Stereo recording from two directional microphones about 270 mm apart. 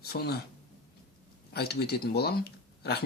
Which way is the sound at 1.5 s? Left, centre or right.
Left.